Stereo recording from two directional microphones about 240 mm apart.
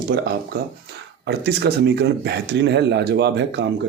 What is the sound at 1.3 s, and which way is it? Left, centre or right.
Speech, right.